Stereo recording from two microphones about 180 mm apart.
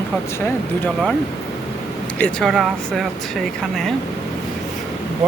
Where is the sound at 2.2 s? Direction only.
5° left (ahead or behind).